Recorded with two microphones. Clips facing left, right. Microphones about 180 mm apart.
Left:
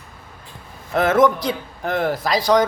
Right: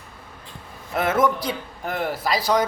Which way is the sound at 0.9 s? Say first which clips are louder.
Left 5 dB; 5° right (ahead or behind).